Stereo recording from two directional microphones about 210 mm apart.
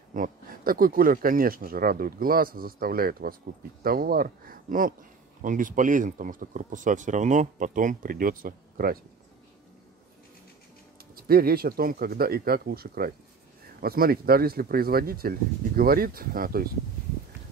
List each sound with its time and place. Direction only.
0.1 s speech: 40° right (ahead or behind)
11.0 s speech: 45° right (ahead or behind)